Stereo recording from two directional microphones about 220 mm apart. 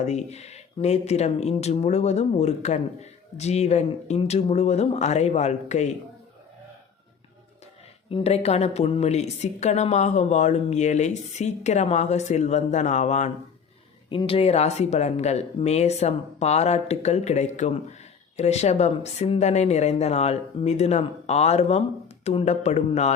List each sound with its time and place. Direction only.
0.0 s speech: 30° left (ahead or behind)
8.1 s a woman's voice: 30° left (ahead or behind)